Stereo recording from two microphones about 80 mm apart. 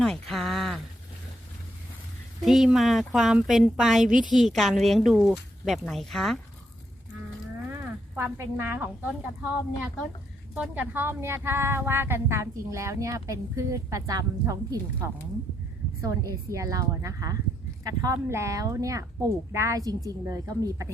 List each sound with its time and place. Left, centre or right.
0.0 s a sound: centre
2.4 s speech: centre
8.1 s a woman's voice: right
10.5 s a woman's voice: centre; by 20.8 s right